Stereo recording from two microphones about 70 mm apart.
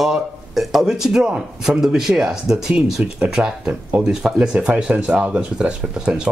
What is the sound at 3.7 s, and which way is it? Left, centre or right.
Speech, centre.